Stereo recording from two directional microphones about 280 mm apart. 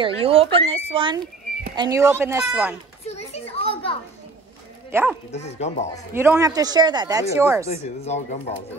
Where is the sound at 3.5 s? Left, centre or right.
Centre.